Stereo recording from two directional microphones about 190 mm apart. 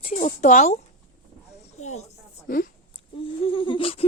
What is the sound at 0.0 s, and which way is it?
Speech, 40° left (ahead or behind).